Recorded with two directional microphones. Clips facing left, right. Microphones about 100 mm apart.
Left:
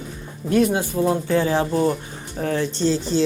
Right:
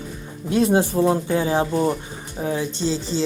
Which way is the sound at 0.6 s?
30° right (ahead or behind).